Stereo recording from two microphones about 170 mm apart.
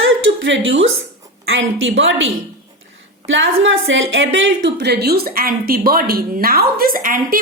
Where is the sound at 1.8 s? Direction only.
90° right.